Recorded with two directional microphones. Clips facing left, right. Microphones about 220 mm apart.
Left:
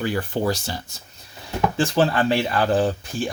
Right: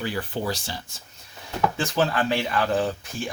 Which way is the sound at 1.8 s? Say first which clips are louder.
Left 6 dB; 30° left (ahead or behind).